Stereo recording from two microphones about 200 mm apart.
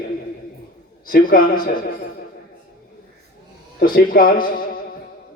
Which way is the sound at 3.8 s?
45° left (ahead or behind).